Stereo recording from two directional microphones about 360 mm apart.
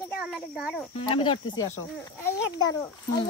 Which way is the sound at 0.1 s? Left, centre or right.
Centre.